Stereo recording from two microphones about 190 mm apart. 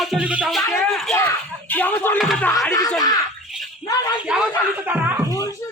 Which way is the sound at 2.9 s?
20° left (ahead or behind).